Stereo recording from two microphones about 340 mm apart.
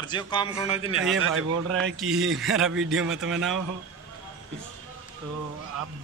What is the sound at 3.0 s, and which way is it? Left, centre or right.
Speech, right.